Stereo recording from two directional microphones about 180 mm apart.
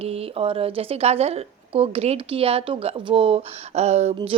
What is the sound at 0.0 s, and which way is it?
Speech, 35° right (ahead or behind).